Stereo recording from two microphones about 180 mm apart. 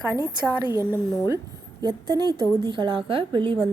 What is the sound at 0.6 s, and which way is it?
A woman's voice, 20° right (ahead or behind).